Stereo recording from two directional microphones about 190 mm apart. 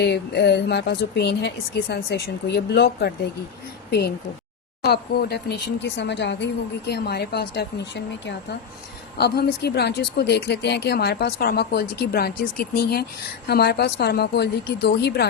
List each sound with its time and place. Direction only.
0.0 s speech: 60° left (ahead or behind)
4.8 s speech: 55° left (ahead or behind)